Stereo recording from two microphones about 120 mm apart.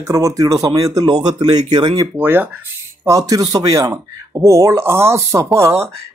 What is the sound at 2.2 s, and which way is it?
Speech, 15° right (ahead or behind).